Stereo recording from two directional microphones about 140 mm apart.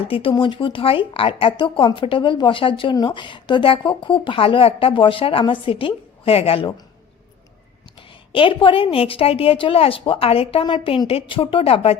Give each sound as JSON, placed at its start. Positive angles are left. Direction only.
{"t": 0.1, "sound": "speech", "side_deg": 40}
{"t": 7.9, "sound": "speech", "side_deg": 40}